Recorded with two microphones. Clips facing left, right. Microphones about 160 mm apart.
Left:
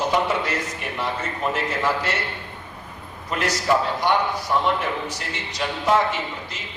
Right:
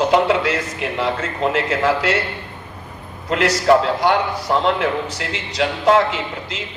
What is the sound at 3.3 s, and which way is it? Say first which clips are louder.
A man's voice: right 7 dB; 85° right.